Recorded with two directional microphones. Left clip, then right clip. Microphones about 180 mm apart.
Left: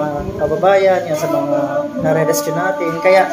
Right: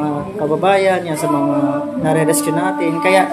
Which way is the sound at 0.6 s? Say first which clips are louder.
Left 2 dB; 25° right (ahead or behind).